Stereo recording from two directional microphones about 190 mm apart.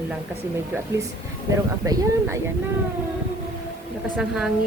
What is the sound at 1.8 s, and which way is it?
Speech, 15° right (ahead or behind).